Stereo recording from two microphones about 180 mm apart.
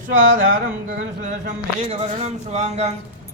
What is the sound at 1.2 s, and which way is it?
A man's voice, 40° right (ahead or behind).